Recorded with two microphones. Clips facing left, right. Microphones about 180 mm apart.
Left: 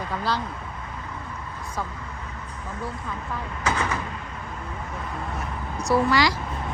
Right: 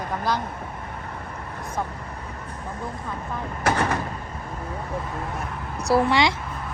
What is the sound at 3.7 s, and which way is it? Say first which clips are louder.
Door: right 4 dB; 60° right (ahead or behind).